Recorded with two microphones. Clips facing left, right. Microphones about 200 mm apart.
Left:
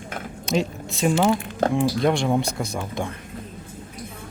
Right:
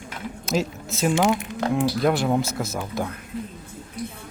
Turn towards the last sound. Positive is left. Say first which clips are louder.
# even
turn(degrees=-5)  # may be behind; listen again after turning